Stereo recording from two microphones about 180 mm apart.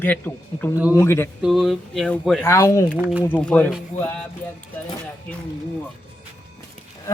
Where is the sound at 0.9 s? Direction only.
15° left (ahead or behind).